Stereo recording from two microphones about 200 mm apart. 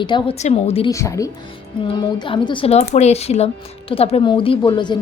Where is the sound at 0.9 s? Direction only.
15° left (ahead or behind).